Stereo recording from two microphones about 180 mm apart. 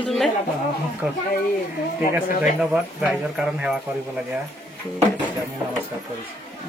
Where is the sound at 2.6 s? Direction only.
5° right (ahead or behind).